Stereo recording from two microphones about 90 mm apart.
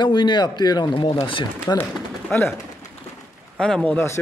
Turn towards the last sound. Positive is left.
turn(degrees=10)  # may be behind; listen again after turning